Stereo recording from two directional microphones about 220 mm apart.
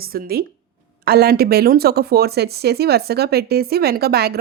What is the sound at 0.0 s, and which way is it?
Speech, 45° right (ahead or behind).